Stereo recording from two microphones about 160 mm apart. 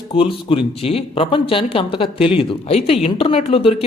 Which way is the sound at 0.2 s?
35° left (ahead or behind).